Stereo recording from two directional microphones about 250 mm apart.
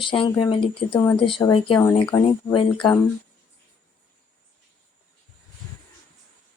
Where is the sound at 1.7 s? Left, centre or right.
Centre.